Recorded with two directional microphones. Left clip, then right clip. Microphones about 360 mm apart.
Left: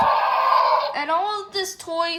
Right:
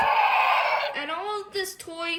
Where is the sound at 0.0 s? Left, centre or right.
Centre.